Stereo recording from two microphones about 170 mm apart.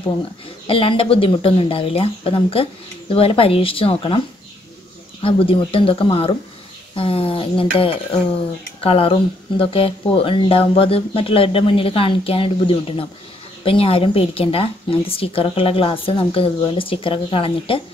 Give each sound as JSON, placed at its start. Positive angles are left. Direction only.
{"t": 0.7, "sound": "speech", "side_deg": 30}
{"t": 5.2, "sound": "speech", "side_deg": 30}